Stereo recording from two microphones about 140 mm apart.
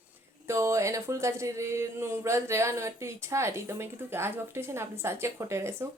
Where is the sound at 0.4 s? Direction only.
20° right (ahead or behind).